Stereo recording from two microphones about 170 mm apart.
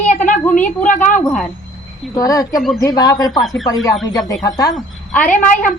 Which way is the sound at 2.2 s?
20° left (ahead or behind).